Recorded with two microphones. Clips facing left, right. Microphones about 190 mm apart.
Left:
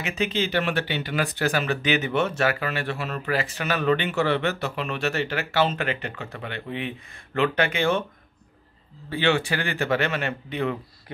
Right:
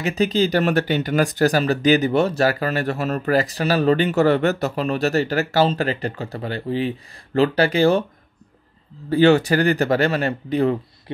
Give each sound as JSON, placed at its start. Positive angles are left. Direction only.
{"t": 0.0, "sound": "speech", "side_deg": -40}
{"t": 9.1, "sound": "speech", "side_deg": -40}